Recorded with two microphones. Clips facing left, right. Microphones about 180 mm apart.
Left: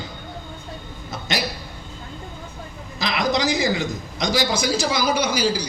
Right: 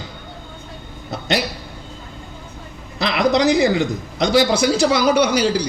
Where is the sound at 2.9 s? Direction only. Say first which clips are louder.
Right 5 dB; 65° right (ahead or behind).